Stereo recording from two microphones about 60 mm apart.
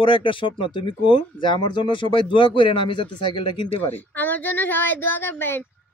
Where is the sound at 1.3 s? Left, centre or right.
Left.